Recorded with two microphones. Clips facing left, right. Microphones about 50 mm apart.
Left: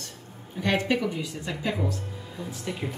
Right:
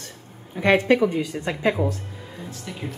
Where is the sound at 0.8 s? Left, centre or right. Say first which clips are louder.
Right 8 dB; right.